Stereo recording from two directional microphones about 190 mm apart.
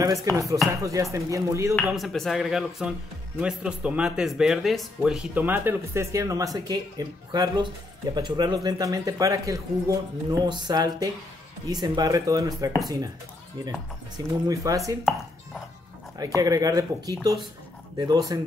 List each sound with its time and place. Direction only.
0.0 s speech: 20° right (ahead or behind)
1.8 s speech: centre (ahead or behind); by 15.0 s 15° right (ahead or behind)
16.3 s speech: 20° right (ahead or behind)